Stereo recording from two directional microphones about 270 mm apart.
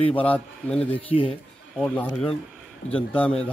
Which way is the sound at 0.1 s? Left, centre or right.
Centre.